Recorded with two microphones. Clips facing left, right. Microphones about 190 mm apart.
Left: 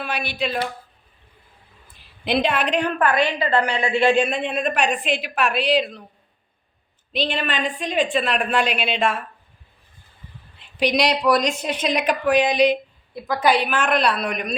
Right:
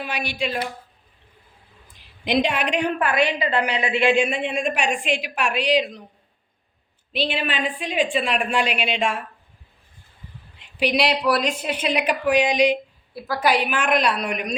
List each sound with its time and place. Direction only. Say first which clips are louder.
0.0 s a woman's voice: left 1 dB; 15° right (ahead or behind)
1.9 s a woman's voice: even; 15° right (ahead or behind)
7.1 s a woman's voice: left 1 dB; 10° right (ahead or behind)
10.6 s a woman's voice: left 1 dB; 10° right (ahead or behind)